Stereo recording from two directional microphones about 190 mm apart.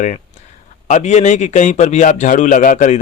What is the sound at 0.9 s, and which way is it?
A man's voice, 35° left (ahead or behind).